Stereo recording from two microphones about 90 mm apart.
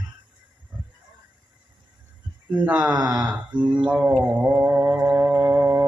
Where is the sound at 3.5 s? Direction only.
60° right (ahead or behind).